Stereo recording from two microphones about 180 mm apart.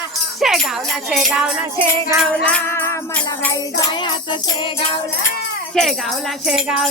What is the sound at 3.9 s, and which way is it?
Jingle bell, 25° left (ahead or behind).